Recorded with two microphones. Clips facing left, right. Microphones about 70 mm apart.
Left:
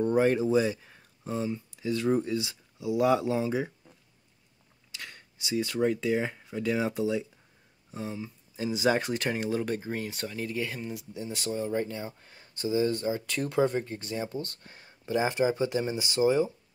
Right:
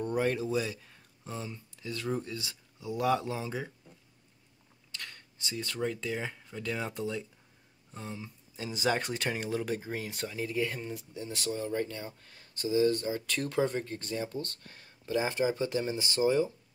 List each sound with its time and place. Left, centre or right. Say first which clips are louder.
0.0 s speech: left 6 dB; left
0.9 s speech: left 8 dB; centre
4.9 s speech: left 1 dB; centre